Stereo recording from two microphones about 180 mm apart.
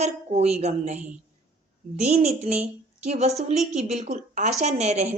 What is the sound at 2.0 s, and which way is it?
A woman's voice, 40° right (ahead or behind).